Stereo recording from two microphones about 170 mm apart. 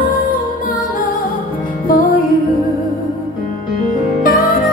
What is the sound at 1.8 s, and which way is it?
Music, 55° left (ahead or behind).